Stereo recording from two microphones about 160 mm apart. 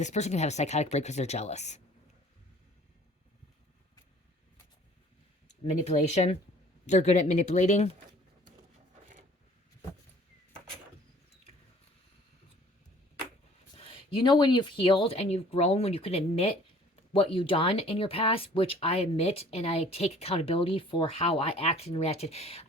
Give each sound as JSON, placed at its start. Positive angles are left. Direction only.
{"t": 0.0, "sound": "speech", "side_deg": 45}
{"t": 5.8, "sound": "speech", "side_deg": 45}
{"t": 13.7, "sound": "speech", "side_deg": 30}